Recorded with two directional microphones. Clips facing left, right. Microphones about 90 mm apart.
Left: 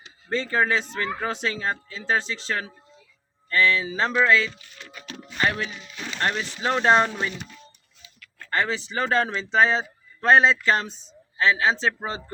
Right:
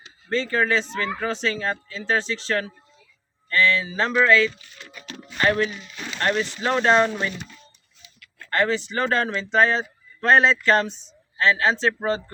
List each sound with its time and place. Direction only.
0.3 s speech: 15° left (ahead or behind)
8.4 s speech: 10° left (ahead or behind)